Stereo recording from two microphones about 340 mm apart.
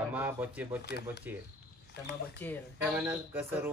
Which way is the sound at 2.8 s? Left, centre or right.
Centre.